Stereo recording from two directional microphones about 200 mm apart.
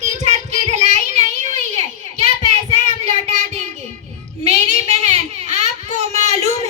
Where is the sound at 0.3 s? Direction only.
35° right (ahead or behind).